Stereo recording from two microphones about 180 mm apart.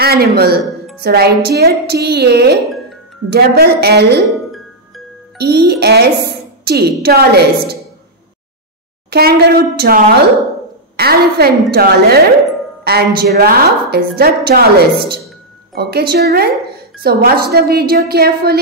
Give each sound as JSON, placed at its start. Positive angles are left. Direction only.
{"t": 0.0, "sound": "speech", "side_deg": -60}
{"t": 5.4, "sound": "speech", "side_deg": -65}
{"t": 9.1, "sound": "speech", "side_deg": -60}